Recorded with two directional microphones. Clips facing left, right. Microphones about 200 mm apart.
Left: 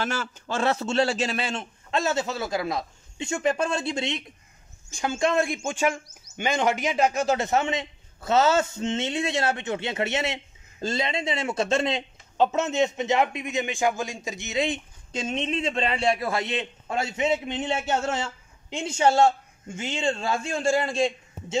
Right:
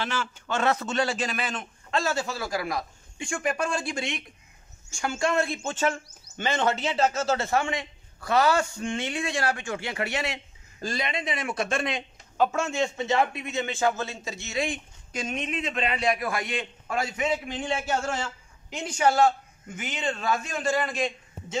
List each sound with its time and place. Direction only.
0.0 s a man's voice: 45° left (ahead or behind); by 21.5 s 25° left (ahead or behind)